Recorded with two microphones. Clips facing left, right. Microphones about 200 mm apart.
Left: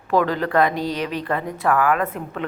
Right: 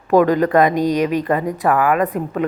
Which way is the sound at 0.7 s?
45° right (ahead or behind).